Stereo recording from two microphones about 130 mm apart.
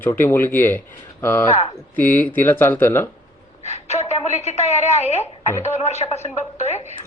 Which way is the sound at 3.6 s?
60° left (ahead or behind).